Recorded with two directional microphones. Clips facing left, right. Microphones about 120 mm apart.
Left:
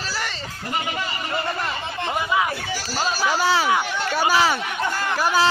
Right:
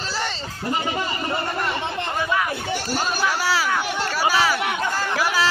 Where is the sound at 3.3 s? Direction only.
25° left (ahead or behind).